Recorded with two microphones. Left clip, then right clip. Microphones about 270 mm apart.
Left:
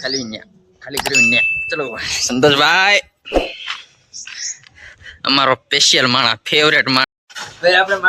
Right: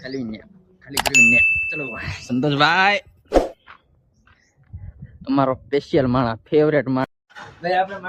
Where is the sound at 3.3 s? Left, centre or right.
Centre.